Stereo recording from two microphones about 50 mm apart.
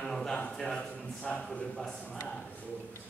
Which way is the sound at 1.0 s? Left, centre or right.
Centre.